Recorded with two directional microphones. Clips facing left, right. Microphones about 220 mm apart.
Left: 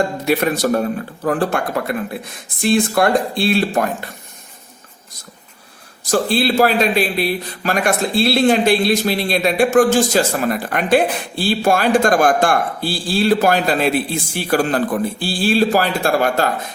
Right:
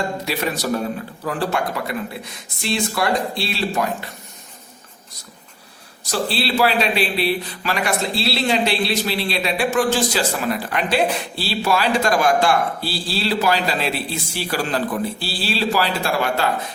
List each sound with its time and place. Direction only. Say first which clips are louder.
0.3 s speech: left 8 dB; 55° left (ahead or behind)
6.1 s speech: left 6 dB; 50° left (ahead or behind)